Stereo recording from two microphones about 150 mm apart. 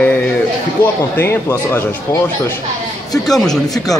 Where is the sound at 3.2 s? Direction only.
Centre (ahead or behind).